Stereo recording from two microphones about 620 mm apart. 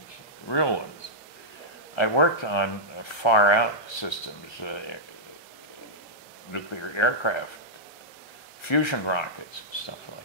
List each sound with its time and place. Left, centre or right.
0.5 s speech: left
2.0 s speech: left
6.5 s speech: left
8.6 s speech: left